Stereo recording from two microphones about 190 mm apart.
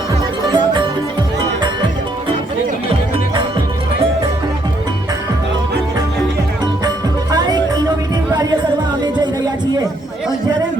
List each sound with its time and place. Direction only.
0.5 s music: 25° right (ahead or behind)
6.8 s music: 20° right (ahead or behind)